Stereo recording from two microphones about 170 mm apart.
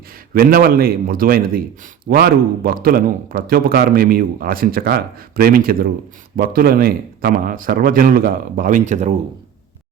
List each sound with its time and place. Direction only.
0.3 s a man's voice: 60° right (ahead or behind); by 9.1 s 45° right (ahead or behind)